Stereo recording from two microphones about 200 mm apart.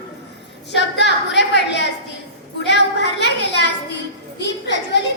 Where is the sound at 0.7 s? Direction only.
60° left (ahead or behind).